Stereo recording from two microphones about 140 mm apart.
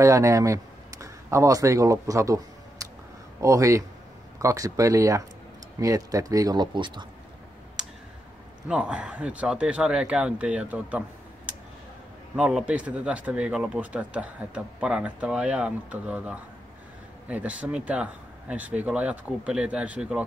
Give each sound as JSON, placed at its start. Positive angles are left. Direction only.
{"t": 0.0, "sound": "speech", "side_deg": -20}
{"t": 7.8, "sound": "tick", "side_deg": -5}
{"t": 8.6, "sound": "speech", "side_deg": -10}